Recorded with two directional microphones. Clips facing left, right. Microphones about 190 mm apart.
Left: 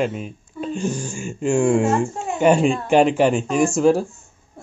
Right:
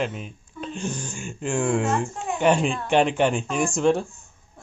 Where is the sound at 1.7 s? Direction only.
45° left (ahead or behind).